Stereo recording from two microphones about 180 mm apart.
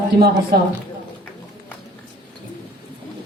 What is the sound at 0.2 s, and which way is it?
Speech, 60° right (ahead or behind).